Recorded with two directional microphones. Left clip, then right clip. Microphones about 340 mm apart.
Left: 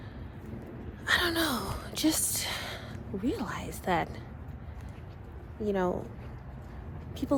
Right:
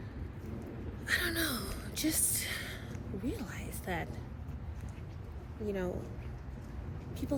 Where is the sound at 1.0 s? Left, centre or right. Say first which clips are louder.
Left 6 dB; centre.